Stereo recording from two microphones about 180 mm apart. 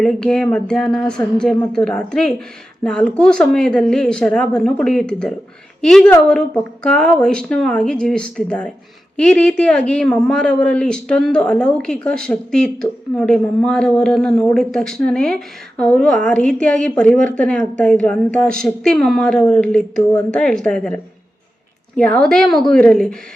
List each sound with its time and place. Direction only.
0.0 s a woman's voice: 5° left (ahead or behind)